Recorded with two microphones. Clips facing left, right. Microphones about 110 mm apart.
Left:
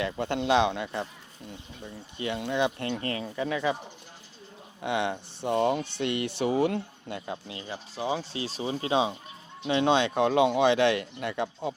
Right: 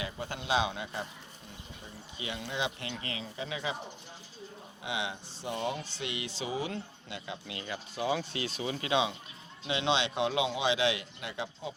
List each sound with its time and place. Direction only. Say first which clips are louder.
0.0 s speech: left 9 dB; 65° left (ahead or behind)
2.1 s speech: left 8 dB; 55° left (ahead or behind)
4.8 s speech: left 8 dB; 55° left (ahead or behind)
7.4 s speech: left 1 dB; 30° left (ahead or behind); by 11.7 s 55° left (ahead or behind)